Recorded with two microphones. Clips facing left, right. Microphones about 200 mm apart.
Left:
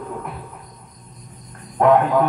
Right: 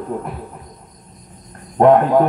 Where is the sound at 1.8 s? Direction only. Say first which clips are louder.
Right 4 dB; 35° right (ahead or behind).